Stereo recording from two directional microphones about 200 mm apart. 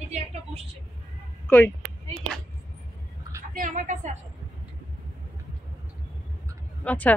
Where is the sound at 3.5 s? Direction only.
40° right (ahead or behind).